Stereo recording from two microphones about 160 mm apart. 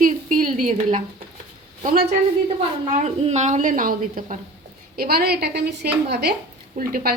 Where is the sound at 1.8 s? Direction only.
55° right (ahead or behind).